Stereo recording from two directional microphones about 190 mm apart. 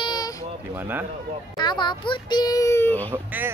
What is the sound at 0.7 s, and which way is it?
Speech, 10° right (ahead or behind).